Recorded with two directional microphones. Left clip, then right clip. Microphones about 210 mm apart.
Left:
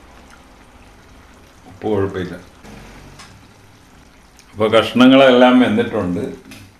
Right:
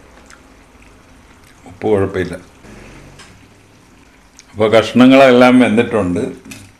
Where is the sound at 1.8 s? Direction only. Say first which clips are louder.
Right 5 dB; 40° right (ahead or behind).